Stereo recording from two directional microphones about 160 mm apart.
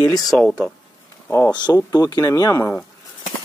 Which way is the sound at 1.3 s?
20° left (ahead or behind).